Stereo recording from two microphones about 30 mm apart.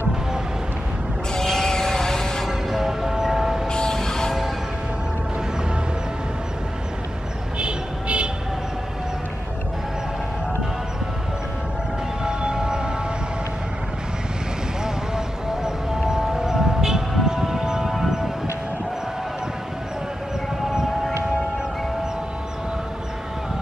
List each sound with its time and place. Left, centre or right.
1.3 s sheep: centre
2.4 s music: centre
3.6 s music: left
7.5 s a sound: right
12.3 s music: right
16.0 s music: centre
17.8 s a sound: centre